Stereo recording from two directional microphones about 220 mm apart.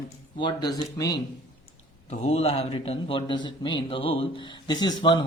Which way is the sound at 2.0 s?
30° left (ahead or behind).